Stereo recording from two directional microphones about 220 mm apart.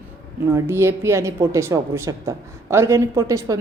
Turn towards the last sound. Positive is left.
turn(degrees=-15)  # may be behind; listen again after turning